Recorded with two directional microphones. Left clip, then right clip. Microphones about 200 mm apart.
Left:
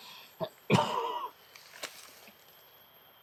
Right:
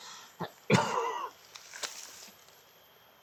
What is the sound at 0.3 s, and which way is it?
Cough, 5° right (ahead or behind).